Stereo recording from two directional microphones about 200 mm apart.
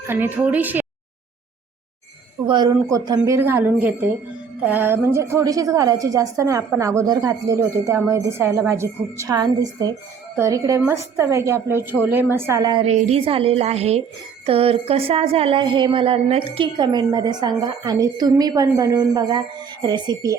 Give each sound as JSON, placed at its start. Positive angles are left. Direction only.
{"t": 0.1, "sound": "a woman's voice", "side_deg": -10}
{"t": 2.5, "sound": "a woman's voice", "side_deg": -20}